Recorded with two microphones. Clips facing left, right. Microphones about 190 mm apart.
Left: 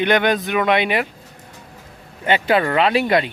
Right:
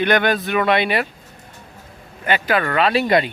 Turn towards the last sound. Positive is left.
turn(degrees=0)  # may be behind; listen again after turning